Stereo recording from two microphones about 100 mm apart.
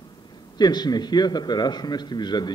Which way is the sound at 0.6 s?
45° left (ahead or behind).